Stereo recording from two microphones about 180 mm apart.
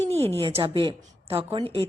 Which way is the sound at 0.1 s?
10° left (ahead or behind).